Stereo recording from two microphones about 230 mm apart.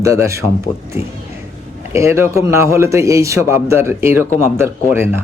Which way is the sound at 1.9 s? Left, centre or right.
Centre.